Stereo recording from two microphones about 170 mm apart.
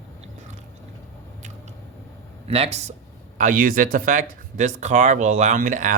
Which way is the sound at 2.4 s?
40° right (ahead or behind).